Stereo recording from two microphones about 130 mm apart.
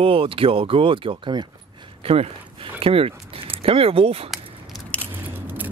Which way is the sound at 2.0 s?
50° right (ahead or behind).